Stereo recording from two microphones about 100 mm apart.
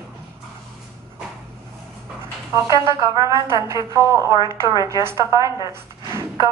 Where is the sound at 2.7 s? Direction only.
30° right (ahead or behind).